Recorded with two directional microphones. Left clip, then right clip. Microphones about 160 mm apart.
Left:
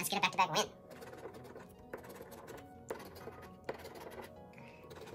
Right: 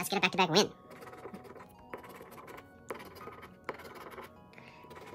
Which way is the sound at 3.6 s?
25° right (ahead or behind).